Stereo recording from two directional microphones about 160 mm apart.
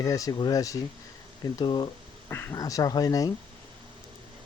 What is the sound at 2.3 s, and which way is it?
Speech, 15° left (ahead or behind).